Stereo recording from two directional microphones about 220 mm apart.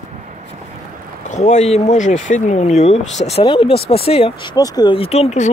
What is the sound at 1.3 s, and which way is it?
Speech, 30° left (ahead or behind).